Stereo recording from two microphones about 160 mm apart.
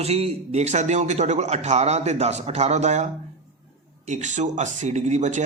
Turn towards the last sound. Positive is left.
turn(degrees=-50)  # may be behind; listen again after turning